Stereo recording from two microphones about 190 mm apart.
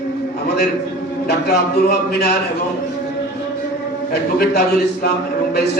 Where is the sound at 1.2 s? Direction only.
55° left (ahead or behind).